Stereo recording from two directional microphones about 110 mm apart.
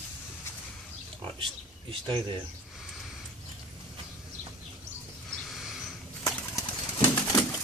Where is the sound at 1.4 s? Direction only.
50° right (ahead or behind).